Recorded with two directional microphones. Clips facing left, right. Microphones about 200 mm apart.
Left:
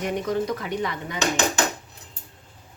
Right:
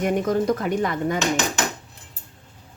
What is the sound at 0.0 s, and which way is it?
Speech, 50° right (ahead or behind).